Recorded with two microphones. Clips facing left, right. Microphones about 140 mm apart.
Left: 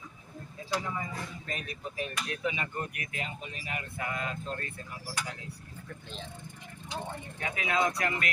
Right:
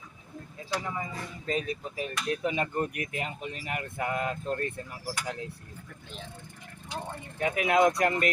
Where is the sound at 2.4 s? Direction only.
40° right (ahead or behind).